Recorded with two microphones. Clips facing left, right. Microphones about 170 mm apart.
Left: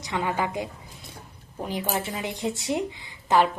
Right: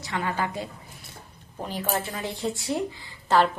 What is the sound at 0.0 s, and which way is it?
A woman's voice, 20° left (ahead or behind).